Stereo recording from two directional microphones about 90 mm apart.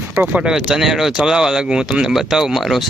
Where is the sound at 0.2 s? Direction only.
15° right (ahead or behind).